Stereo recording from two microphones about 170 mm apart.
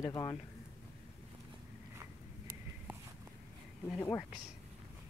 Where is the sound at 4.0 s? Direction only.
10° left (ahead or behind).